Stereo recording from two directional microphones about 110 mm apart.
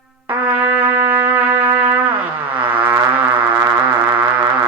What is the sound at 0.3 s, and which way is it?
Trumpet, 15° right (ahead or behind).